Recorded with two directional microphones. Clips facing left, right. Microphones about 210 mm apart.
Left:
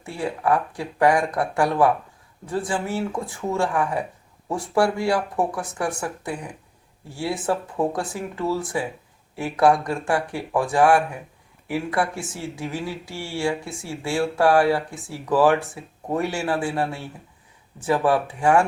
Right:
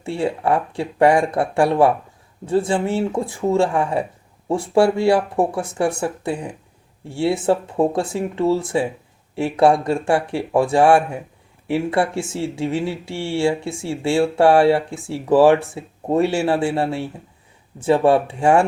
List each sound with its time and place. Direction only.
0.0 s speech: 25° right (ahead or behind)